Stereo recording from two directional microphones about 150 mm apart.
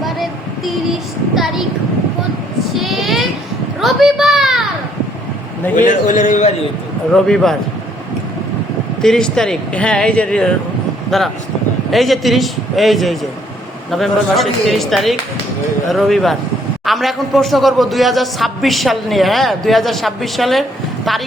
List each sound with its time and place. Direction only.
0.0 s a sound: centre (ahead or behind)
2.7 s child singing: centre (ahead or behind)
3.8 s a sound: centre (ahead or behind)
5.7 s a man's voice: 60° left (ahead or behind)
7.1 s a man's voice: 5° left (ahead or behind)
9.0 s a man's voice: 5° left (ahead or behind)